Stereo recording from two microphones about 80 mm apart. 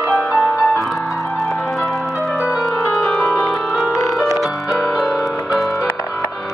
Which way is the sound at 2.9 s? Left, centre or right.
Centre.